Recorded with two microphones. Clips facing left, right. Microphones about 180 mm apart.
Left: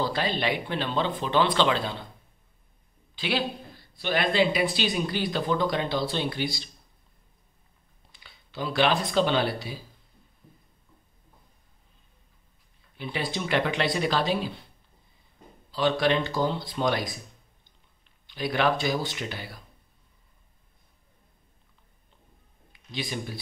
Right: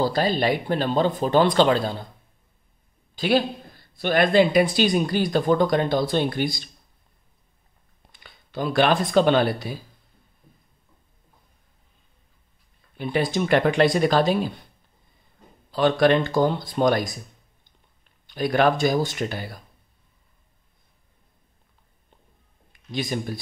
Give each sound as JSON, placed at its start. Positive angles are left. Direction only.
{"t": 0.0, "sound": "speech", "side_deg": -40}
{"t": 3.2, "sound": "speech", "side_deg": -45}
{"t": 8.1, "sound": "speech", "side_deg": -50}
{"t": 12.9, "sound": "speech", "side_deg": -50}
{"t": 15.7, "sound": "speech", "side_deg": -50}
{"t": 18.2, "sound": "speech", "side_deg": -45}
{"t": 22.7, "sound": "speech", "side_deg": -45}